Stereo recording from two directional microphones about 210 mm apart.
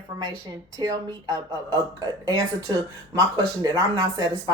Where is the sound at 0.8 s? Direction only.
20° right (ahead or behind).